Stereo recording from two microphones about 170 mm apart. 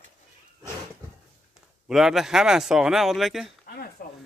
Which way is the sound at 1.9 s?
Centre (ahead or behind).